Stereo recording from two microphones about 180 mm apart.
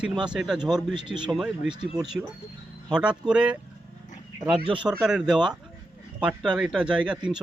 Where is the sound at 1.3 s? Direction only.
Centre (ahead or behind).